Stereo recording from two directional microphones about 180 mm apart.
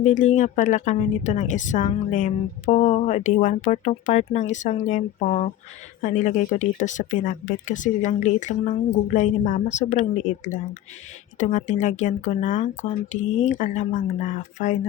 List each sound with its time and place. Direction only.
0.2 s a woman's voice: 40° left (ahead or behind)